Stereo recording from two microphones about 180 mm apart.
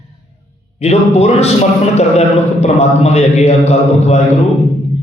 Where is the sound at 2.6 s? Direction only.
35° left (ahead or behind).